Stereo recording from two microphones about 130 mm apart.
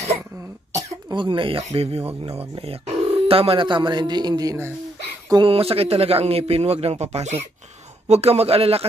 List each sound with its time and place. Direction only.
1.1 s speech: 40° right (ahead or behind)
1.6 s speech: 50° right (ahead or behind); by 4.7 s 25° right (ahead or behind)
5.4 s speech: 50° right (ahead or behind)